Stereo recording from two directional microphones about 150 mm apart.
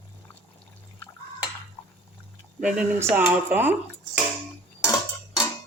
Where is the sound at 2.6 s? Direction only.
5° right (ahead or behind).